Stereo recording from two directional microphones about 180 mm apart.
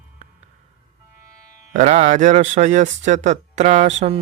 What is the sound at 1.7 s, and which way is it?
Speech, 40° right (ahead or behind).